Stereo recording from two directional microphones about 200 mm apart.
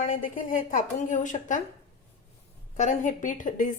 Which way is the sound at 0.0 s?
40° left (ahead or behind).